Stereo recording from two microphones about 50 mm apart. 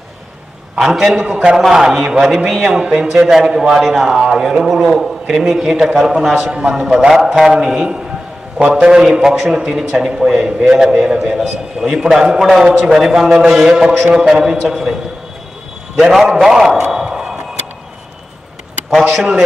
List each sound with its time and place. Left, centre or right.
0.7 s a man's voice: centre
13.7 s a man's voice: centre
16.3 s a man's voice: centre
17.0 s a sound: centre
19.1 s a man's voice: centre